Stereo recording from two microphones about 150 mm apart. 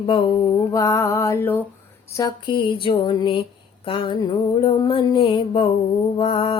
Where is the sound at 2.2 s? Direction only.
30° left (ahead or behind).